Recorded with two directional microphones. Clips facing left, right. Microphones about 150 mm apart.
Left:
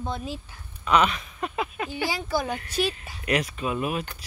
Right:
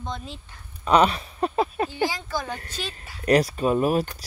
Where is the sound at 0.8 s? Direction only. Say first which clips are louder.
Right 3 dB; 35° right (ahead or behind).